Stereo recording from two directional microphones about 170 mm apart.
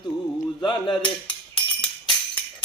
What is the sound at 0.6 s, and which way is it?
Speech, 30° left (ahead or behind).